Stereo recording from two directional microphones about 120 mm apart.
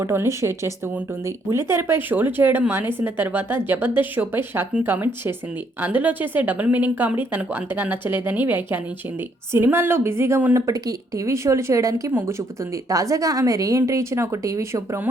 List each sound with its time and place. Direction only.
0.0 s a woman's voice: 20° right (ahead or behind)